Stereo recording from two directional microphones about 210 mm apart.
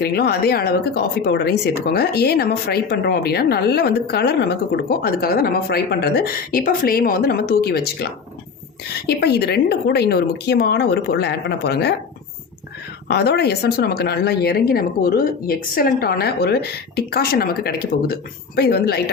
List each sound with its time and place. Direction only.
0.0 s speech: 50° left (ahead or behind)
9.0 s speech: 50° left (ahead or behind)
13.1 s speech: 50° left (ahead or behind)